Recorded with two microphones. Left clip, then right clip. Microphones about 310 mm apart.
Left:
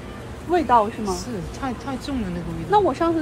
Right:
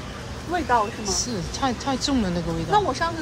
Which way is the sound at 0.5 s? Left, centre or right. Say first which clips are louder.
Left 4 dB; left.